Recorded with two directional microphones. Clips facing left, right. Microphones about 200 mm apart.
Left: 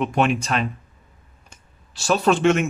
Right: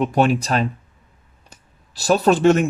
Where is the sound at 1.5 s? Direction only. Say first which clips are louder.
Right 4 dB; 40° right (ahead or behind).